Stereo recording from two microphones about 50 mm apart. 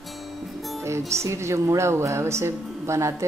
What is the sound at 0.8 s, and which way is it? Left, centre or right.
Speech, right.